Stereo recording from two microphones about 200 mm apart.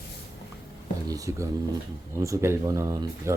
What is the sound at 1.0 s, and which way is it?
Speech, 15° right (ahead or behind).